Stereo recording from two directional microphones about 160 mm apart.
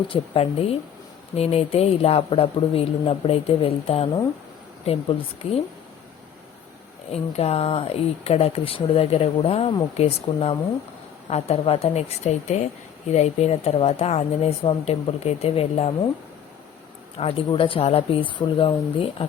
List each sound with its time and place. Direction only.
0.1 s speech: 35° left (ahead or behind)
7.1 s speech: 40° left (ahead or behind)
17.2 s speech: 35° left (ahead or behind)